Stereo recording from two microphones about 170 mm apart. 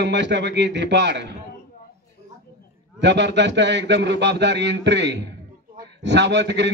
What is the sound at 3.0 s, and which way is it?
Speech, 90° right.